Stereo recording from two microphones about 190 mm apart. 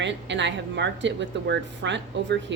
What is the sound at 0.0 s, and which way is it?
Speech, 70° right (ahead or behind).